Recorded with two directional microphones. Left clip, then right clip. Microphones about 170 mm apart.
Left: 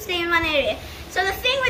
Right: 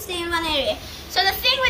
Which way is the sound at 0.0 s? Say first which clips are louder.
Left 3 dB; 20° right (ahead or behind).